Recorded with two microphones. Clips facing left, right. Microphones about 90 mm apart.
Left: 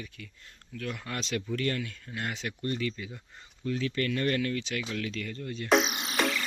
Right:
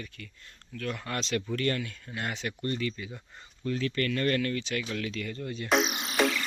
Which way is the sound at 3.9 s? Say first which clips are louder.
Right 1 dB; 15° left (ahead or behind).